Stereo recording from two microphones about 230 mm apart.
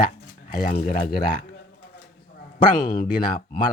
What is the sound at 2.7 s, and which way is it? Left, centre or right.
Speech, left.